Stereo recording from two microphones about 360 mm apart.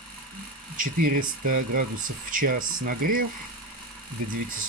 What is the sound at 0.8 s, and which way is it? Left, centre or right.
Speech, right.